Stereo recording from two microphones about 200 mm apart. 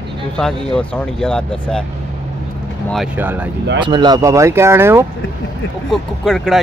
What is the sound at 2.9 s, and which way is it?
Speech, 10° right (ahead or behind).